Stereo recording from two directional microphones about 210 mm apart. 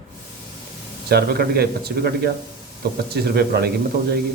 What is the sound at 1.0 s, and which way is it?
Speech, 50° right (ahead or behind).